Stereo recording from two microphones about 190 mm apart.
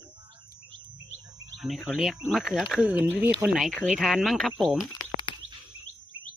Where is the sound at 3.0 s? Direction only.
10° right (ahead or behind).